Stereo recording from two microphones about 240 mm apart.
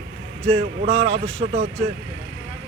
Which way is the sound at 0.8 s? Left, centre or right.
Right.